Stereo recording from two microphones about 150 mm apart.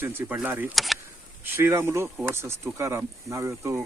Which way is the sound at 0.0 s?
15° right (ahead or behind).